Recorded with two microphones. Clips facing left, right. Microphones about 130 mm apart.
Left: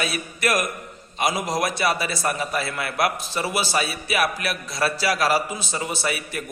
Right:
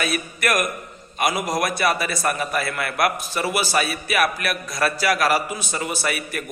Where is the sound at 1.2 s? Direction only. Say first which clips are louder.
Right 1 dB; 25° left (ahead or behind).